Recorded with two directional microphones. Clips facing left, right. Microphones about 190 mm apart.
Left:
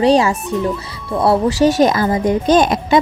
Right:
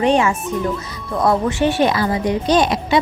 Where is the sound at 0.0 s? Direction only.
35° left (ahead or behind).